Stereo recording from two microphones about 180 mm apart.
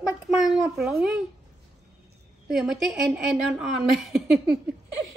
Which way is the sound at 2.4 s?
Centre (ahead or behind).